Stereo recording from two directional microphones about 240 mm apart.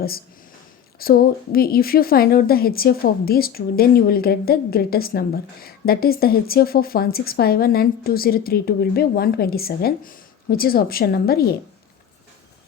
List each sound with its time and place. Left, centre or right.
0.9 s a woman's voice: left